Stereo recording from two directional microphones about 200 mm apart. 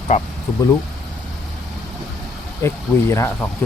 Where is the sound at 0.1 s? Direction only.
35° left (ahead or behind).